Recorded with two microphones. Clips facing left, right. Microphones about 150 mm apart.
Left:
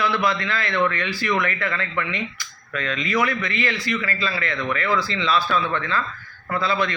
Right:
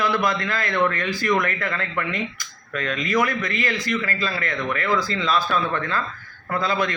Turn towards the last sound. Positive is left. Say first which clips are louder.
# even
turn(degrees=-45)  # may be behind; listen again after turning